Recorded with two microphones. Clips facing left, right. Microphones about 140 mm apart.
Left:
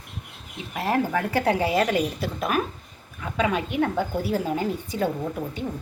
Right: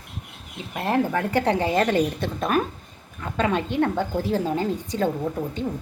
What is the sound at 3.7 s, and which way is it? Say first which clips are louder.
A woman's voice: right 1 dB; 10° left (ahead or behind).